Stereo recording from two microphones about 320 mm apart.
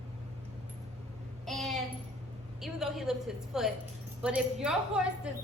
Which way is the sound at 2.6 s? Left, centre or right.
Centre.